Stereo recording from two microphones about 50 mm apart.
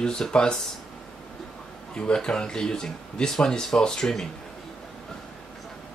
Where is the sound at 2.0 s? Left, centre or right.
Centre.